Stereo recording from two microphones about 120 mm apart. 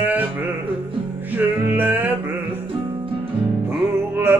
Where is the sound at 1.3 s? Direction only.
15° right (ahead or behind).